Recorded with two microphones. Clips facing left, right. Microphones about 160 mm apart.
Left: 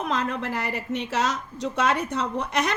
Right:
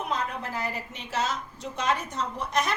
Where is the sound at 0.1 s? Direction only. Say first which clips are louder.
Left 4 dB; 80° left.